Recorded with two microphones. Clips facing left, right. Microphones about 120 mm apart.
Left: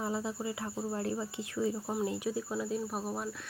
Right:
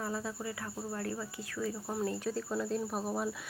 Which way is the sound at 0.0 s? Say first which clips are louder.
Left 3 dB; 20° left (ahead or behind).